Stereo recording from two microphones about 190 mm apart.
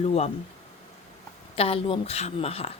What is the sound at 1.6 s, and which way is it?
Speech, 30° left (ahead or behind).